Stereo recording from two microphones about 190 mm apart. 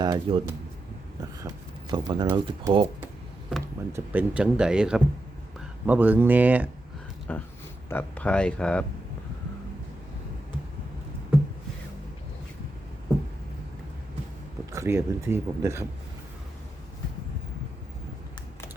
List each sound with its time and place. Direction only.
0.0 s speech: 25° right (ahead or behind)
3.9 s speech: 10° right (ahead or behind)
7.3 s speech: 10° left (ahead or behind)
14.7 s speech: 15° right (ahead or behind)